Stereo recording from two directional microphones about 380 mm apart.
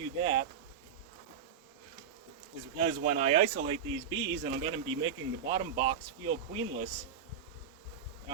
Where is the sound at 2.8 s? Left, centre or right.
Centre.